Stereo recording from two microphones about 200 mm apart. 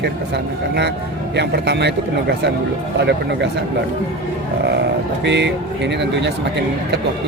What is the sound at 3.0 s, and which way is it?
Speech, 60° right (ahead or behind).